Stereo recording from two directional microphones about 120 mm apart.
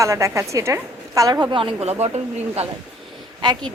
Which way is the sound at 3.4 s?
40° right (ahead or behind).